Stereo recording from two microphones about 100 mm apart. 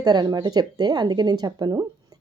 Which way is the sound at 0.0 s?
45° right (ahead or behind).